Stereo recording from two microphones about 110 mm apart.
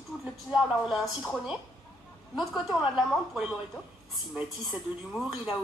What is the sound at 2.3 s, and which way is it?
Speech, 5° right (ahead or behind).